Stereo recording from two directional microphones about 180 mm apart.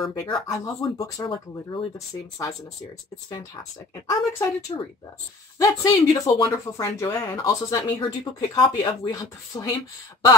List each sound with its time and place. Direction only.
0.0 s speech: 20° left (ahead or behind)
4.1 s speech: 20° left (ahead or behind)